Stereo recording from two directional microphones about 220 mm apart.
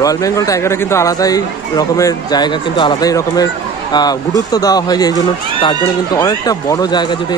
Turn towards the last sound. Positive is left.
turn(degrees=20)  # may be behind; listen again after turning